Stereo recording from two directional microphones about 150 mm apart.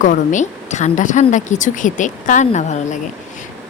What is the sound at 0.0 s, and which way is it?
Speech, 55° left (ahead or behind).